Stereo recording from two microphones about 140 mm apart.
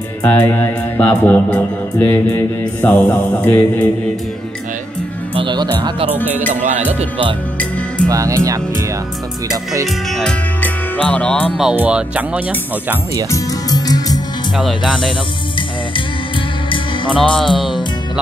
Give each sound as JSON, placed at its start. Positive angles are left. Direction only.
{"t": 0.2, "sound": "music", "side_deg": 10}
{"t": 5.3, "sound": "speech", "side_deg": -35}
{"t": 8.1, "sound": "speech", "side_deg": -20}
{"t": 10.1, "sound": "speech", "side_deg": 5}
{"t": 11.5, "sound": "speech", "side_deg": -5}
{"t": 13.3, "sound": "music", "side_deg": 25}
{"t": 14.9, "sound": "music", "side_deg": 0}
{"t": 17.1, "sound": "music", "side_deg": 5}